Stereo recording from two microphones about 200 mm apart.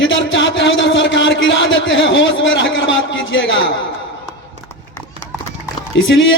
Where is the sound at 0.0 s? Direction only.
70° left (ahead or behind).